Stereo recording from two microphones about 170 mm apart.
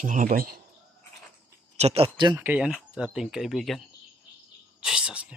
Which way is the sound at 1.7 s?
35° right (ahead or behind).